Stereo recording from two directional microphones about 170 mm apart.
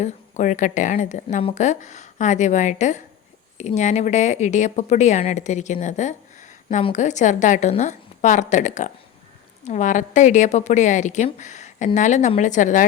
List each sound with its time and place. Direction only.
0.0 s speech: 45° left (ahead or behind)
11.3 s a sound: 45° left (ahead or behind)
11.9 s speech: 45° left (ahead or behind)